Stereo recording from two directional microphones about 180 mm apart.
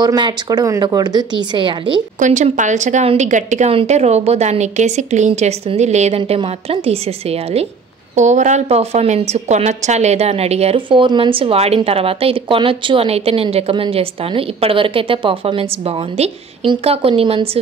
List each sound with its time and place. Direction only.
0.0 s a woman's voice: 20° right (ahead or behind)
2.1 s a woman's voice: 45° right (ahead or behind)